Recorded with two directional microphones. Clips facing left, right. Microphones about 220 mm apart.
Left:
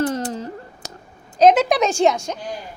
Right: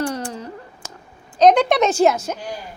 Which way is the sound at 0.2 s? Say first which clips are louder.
Left 3 dB; 40° left (ahead or behind).